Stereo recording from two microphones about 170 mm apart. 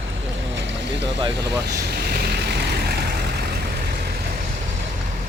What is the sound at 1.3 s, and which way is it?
Speech, 75° right (ahead or behind).